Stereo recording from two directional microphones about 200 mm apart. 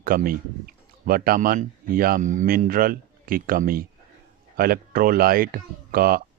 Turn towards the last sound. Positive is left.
turn(degrees=-45)  # may be behind; listen again after turning